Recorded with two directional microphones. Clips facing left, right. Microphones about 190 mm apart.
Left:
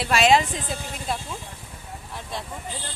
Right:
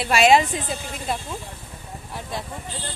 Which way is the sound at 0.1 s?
10° right (ahead or behind).